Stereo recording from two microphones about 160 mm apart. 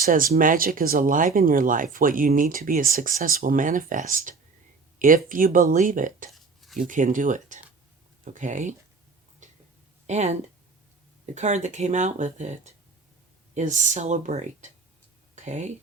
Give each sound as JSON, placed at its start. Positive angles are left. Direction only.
{"t": 0.0, "sound": "speech", "side_deg": -60}
{"t": 6.3, "sound": "a sound", "side_deg": 0}
{"t": 6.7, "sound": "speech", "side_deg": -55}
{"t": 10.1, "sound": "speech", "side_deg": -45}
{"t": 11.3, "sound": "speech", "side_deg": -45}